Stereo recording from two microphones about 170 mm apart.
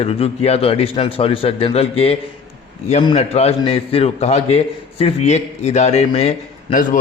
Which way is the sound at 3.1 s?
40° left (ahead or behind).